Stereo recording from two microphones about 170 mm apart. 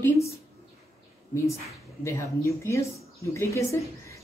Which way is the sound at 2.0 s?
15° left (ahead or behind).